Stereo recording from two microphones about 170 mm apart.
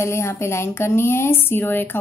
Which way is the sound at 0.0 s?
15° left (ahead or behind).